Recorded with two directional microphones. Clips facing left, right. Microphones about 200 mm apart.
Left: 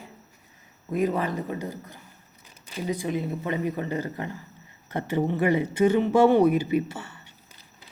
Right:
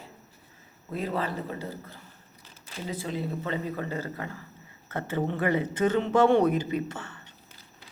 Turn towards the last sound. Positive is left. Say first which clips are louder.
# left 5 dB
turn(degrees=10)  # may be behind; listen again after turning